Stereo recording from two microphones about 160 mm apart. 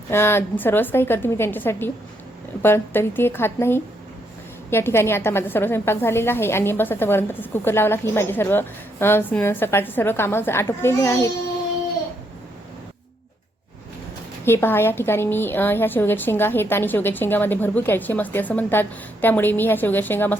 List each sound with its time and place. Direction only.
0.1 s a woman's voice: 15° left (ahead or behind)
14.4 s a woman's voice: 15° left (ahead or behind)